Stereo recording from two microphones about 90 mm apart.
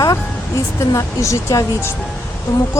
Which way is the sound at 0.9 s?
35° left (ahead or behind).